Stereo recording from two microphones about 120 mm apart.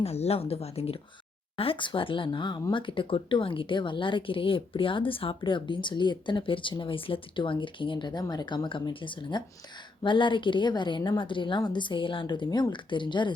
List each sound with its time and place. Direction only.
0.0 s a woman's voice: 60° left (ahead or behind); by 13.3 s 40° left (ahead or behind)